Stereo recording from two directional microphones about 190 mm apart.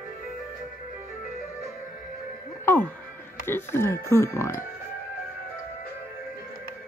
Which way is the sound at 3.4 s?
10° left (ahead or behind).